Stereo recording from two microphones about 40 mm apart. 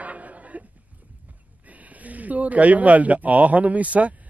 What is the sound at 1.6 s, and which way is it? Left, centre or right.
Speech, right.